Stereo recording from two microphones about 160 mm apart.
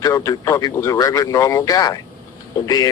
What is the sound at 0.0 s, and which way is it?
Speech, 20° left (ahead or behind).